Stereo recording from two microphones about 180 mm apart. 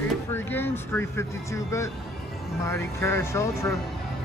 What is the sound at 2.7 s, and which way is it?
Speech, 15° left (ahead or behind).